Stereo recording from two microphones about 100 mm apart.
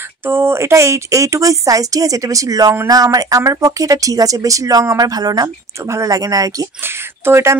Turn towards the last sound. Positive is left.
turn(degrees=-25)  # may be behind; listen again after turning